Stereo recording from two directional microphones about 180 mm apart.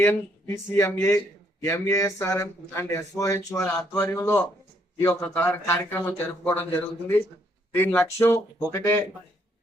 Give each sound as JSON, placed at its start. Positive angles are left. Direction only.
{"t": 0.0, "sound": "speech", "side_deg": 15}